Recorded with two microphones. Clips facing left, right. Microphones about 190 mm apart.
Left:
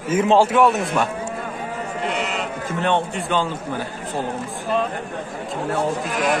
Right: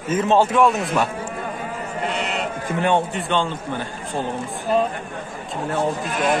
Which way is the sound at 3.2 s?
5° left (ahead or behind).